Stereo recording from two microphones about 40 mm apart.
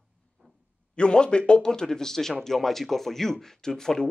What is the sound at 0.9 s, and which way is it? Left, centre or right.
Speech, left.